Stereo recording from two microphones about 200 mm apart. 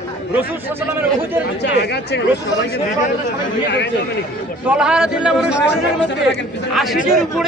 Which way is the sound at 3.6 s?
60° left (ahead or behind).